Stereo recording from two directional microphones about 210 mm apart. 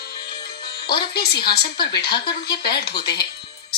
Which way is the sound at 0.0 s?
50° left (ahead or behind).